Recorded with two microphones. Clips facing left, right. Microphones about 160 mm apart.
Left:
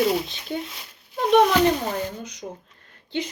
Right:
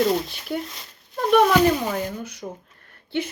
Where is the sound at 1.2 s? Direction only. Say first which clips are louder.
Even; 50° right (ahead or behind).